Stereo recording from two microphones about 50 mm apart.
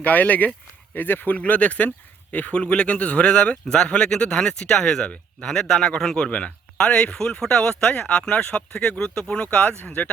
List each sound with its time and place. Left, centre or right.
0.0 s speech: left
1.4 s speech: left